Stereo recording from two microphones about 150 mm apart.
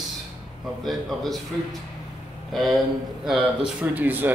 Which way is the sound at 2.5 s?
Centre (ahead or behind).